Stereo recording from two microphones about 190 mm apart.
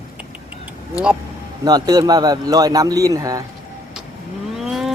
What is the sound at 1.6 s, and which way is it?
A man's voice, 20° right (ahead or behind).